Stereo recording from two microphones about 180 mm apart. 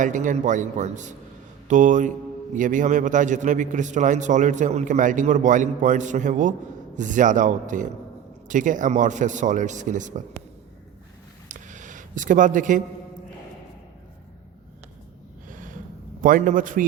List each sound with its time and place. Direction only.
0.0 s a man's voice: 45° right (ahead or behind)
11.4 s a sound: 45° right (ahead or behind)
16.2 s a man's voice: 45° right (ahead or behind)